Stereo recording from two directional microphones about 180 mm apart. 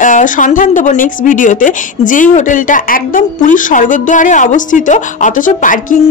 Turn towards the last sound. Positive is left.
turn(degrees=45)  # may be behind; listen again after turning